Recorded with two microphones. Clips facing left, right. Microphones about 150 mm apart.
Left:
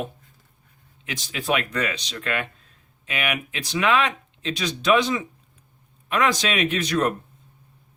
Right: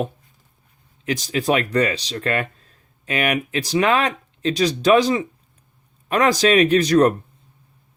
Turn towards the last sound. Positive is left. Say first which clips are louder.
# right 8 dB
turn(degrees=-35)  # may be behind; listen again after turning